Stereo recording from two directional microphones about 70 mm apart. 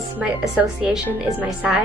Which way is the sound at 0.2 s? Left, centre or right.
Right.